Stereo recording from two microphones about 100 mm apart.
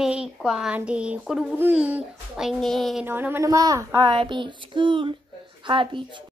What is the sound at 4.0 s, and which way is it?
Child singing, 55° right (ahead or behind).